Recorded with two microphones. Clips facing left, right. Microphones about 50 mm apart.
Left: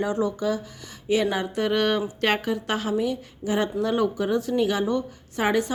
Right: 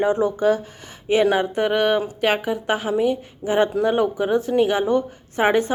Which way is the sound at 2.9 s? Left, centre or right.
Right.